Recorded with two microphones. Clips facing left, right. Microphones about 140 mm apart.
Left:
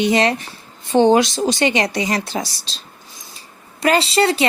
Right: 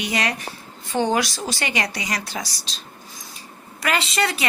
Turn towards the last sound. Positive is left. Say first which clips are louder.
# left 7 dB
turn(degrees=30)  # may be behind; listen again after turning